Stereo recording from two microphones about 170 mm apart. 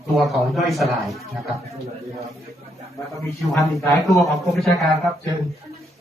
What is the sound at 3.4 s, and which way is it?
A man's voice, centre (ahead or behind).